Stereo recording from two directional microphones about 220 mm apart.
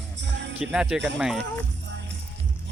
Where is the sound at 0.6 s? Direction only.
5° right (ahead or behind).